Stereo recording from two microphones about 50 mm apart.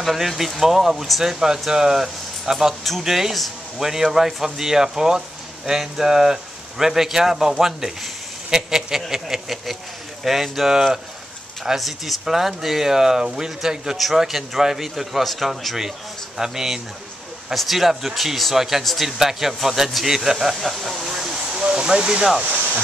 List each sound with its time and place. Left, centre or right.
0.0 s speech: centre
21.5 s a sound: right
21.8 s speech: centre